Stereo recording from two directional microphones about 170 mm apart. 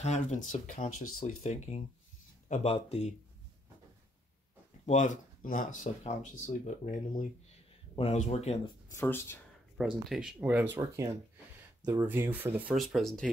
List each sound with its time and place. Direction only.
0.0 s speech: 40° left (ahead or behind)
4.8 s speech: 45° left (ahead or behind)
7.9 s speech: 35° left (ahead or behind)
8.9 s speech: 15° left (ahead or behind)
10.0 s speech: 5° right (ahead or behind)
12.7 s speech: centre (ahead or behind)